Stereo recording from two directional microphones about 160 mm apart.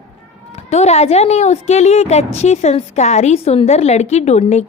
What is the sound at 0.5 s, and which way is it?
A woman's voice, 40° left (ahead or behind).